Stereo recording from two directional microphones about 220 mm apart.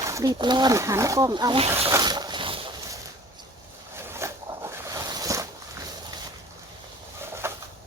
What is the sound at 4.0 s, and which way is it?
Zipper, 10° right (ahead or behind).